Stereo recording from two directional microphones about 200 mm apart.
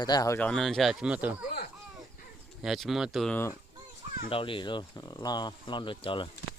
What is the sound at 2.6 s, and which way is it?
Speech, centre (ahead or behind).